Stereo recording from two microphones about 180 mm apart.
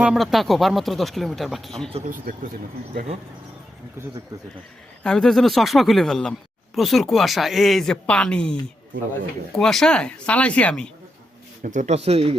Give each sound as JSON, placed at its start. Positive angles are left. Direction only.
{"t": 0.0, "sound": "speech", "side_deg": 0}
{"t": 2.0, "sound": "speech", "side_deg": -50}
{"t": 5.0, "sound": "speech", "side_deg": 5}
{"t": 9.6, "sound": "speech", "side_deg": 0}
{"t": 11.6, "sound": "speech", "side_deg": -45}